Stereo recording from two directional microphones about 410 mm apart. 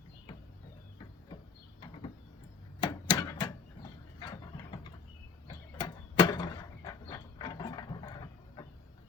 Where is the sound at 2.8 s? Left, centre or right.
Centre.